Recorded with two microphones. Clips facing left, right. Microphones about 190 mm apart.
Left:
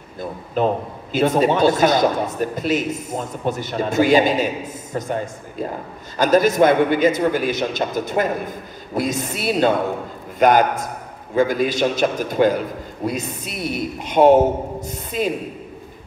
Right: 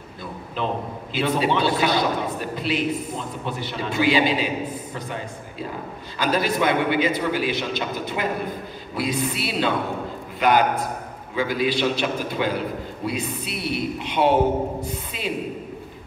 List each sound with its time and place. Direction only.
0.6 s a man's voice: 45° left (ahead or behind)